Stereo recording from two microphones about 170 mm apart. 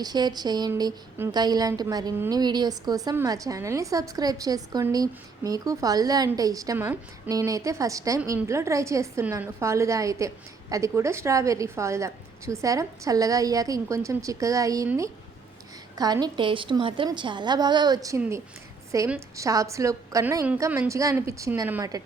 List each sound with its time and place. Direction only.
0.0 s a woman's voice: 25° right (ahead or behind)